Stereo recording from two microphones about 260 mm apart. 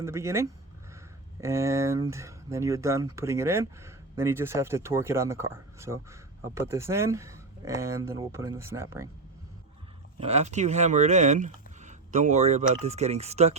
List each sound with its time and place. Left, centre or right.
0.0 s speech: centre
10.2 s speech: right